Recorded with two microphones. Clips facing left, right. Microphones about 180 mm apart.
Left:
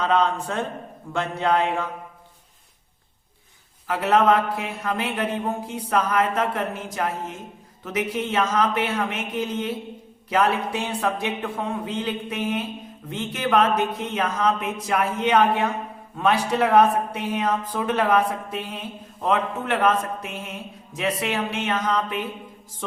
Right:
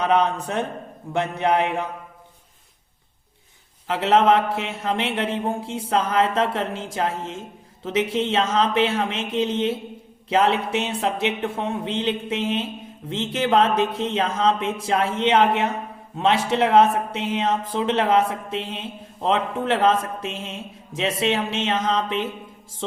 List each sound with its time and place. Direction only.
0.0 s speech: 20° right (ahead or behind)
3.8 s speech: 25° right (ahead or behind)
22.8 s music: 25° right (ahead or behind)